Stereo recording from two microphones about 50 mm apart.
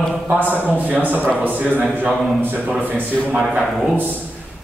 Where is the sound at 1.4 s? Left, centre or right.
Right.